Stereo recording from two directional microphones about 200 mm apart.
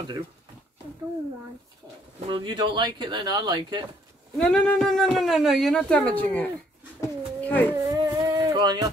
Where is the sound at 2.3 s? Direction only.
25° right (ahead or behind).